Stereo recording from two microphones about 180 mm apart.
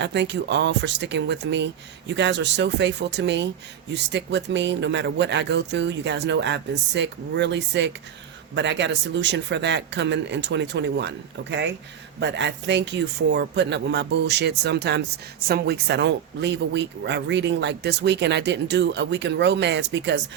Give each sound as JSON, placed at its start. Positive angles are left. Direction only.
{"t": 0.0, "sound": "speech", "side_deg": -75}